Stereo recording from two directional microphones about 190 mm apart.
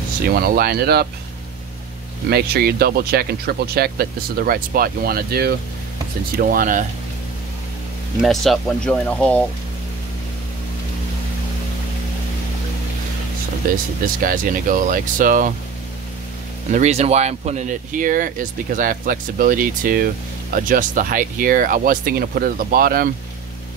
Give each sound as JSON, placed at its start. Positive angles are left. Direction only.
{"t": 0.3, "sound": "speech", "side_deg": -50}
{"t": 2.2, "sound": "speech", "side_deg": -55}
{"t": 8.2, "sound": "speech", "side_deg": 0}
{"t": 13.6, "sound": "speech", "side_deg": -45}
{"t": 16.7, "sound": "speech", "side_deg": -35}